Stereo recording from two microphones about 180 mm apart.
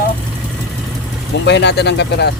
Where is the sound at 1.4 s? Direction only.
75° left (ahead or behind).